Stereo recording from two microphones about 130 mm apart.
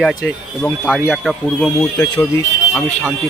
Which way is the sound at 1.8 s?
15° left (ahead or behind).